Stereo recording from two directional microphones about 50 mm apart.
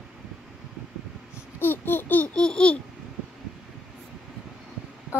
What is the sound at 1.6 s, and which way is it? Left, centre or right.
Babbling, left.